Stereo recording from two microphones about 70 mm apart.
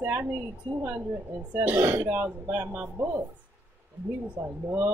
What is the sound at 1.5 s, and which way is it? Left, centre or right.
Speech, right.